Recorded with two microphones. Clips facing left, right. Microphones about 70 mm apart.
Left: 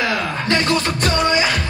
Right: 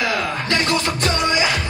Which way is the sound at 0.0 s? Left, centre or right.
Left.